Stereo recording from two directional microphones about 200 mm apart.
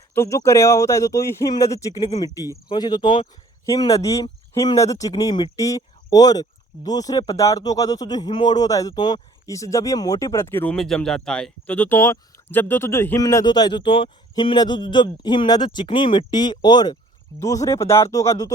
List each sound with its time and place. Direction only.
0.1 s speech: 15° left (ahead or behind)